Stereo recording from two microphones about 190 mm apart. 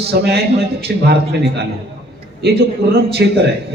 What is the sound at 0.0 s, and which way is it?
Speech, 60° right (ahead or behind).